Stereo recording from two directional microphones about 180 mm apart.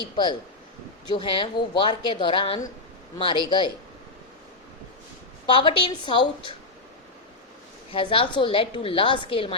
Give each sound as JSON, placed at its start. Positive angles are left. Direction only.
{"t": 0.0, "sound": "a woman's voice", "side_deg": 25}
{"t": 5.5, "sound": "a woman's voice", "side_deg": 30}
{"t": 7.9, "sound": "a woman's voice", "side_deg": 30}